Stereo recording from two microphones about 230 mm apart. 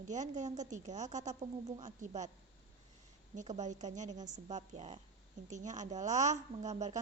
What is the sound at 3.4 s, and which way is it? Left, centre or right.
A woman's voice, right.